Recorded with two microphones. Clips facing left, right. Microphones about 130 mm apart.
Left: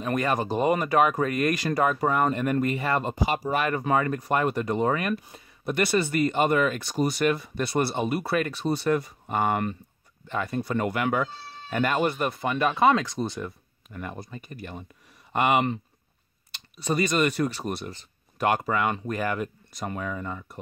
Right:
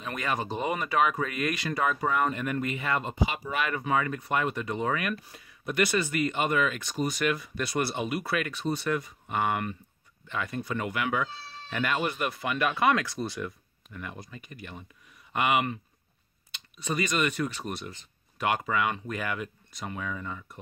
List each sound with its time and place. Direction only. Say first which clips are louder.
0.0 s speech: left 6 dB; 45° left (ahead or behind); by 13.4 s 20° left (ahead or behind)
13.4 s speech: left 1 dB; 45° left (ahead or behind)